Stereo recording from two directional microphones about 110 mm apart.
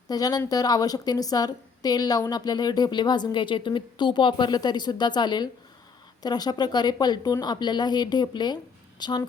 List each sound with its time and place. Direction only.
0.1 s a woman's voice: 35° left (ahead or behind)